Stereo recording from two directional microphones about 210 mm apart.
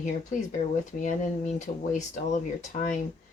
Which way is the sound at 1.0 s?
35° left (ahead or behind).